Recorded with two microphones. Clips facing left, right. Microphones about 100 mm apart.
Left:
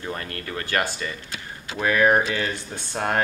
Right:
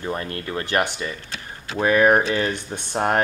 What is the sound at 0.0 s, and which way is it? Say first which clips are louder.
Speech: right 4 dB; 20° right (ahead or behind).